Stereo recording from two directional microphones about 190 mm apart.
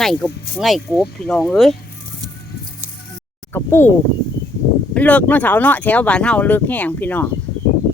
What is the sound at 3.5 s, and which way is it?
Speech, 10° left (ahead or behind).